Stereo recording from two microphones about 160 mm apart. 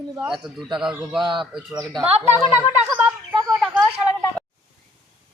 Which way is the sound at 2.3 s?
15° right (ahead or behind).